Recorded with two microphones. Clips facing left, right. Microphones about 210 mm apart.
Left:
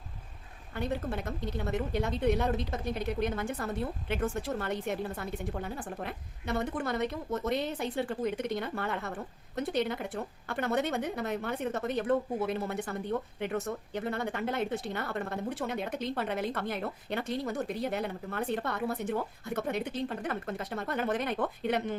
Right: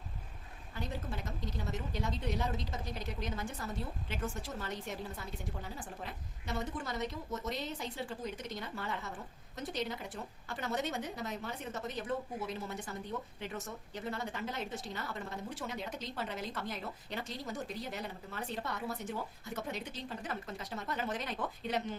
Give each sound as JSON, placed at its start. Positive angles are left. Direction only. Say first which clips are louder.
{"t": 0.7, "sound": "a woman's voice", "louder": "left 8 dB", "side_deg": 60}